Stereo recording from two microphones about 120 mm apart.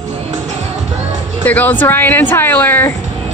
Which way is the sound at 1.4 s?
15° left (ahead or behind).